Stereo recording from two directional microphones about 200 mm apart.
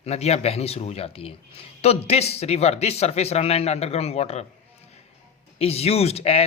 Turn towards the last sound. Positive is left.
turn(degrees=30)  # may be behind; listen again after turning